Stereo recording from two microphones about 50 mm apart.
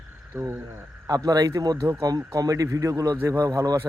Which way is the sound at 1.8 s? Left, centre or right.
Right.